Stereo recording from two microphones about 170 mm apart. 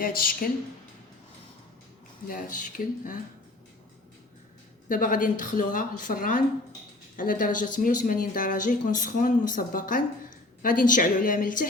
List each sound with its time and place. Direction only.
0.0 s speech: 55° left (ahead or behind)
2.2 s speech: 55° left (ahead or behind)
4.9 s speech: 50° left (ahead or behind)